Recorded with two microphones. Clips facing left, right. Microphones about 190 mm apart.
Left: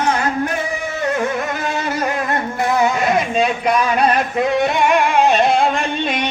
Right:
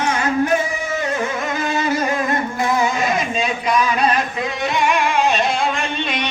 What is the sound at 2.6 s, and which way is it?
Music, 60° left (ahead or behind).